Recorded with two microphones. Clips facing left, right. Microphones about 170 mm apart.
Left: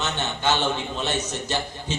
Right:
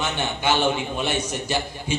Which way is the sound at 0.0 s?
10° right (ahead or behind).